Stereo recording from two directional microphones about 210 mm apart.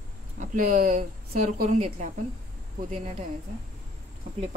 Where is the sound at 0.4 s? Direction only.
40° right (ahead or behind).